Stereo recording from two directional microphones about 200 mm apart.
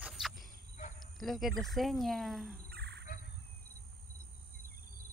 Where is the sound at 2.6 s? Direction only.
55° right (ahead or behind).